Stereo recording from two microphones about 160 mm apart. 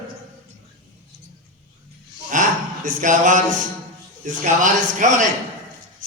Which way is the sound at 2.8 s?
50° right (ahead or behind).